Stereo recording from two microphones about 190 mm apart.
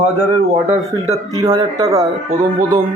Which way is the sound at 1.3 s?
20° right (ahead or behind).